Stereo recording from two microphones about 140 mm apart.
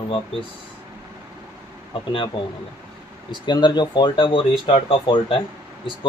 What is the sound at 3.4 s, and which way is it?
Speech, 30° left (ahead or behind).